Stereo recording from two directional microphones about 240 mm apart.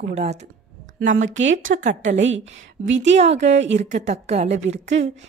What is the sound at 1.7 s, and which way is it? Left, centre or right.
Speech, right.